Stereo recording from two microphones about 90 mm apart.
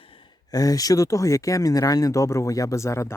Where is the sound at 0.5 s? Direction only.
40° left (ahead or behind).